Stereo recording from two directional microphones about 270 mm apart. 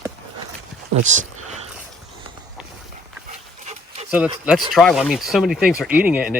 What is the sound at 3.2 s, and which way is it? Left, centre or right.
Dog, right.